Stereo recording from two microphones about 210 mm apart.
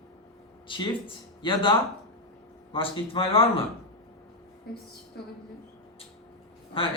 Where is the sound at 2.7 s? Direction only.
25° left (ahead or behind).